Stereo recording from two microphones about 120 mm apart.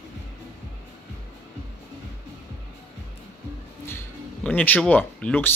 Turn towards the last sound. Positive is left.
turn(degrees=10)  # may be behind; listen again after turning